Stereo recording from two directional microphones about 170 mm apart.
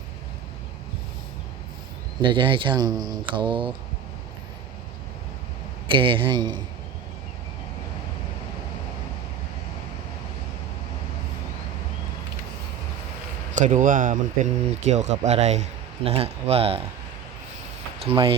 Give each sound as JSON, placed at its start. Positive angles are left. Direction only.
{"t": 2.2, "sound": "speech", "side_deg": -30}
{"t": 5.9, "sound": "speech", "side_deg": -30}
{"t": 13.6, "sound": "speech", "side_deg": -50}
{"t": 18.0, "sound": "speech", "side_deg": -35}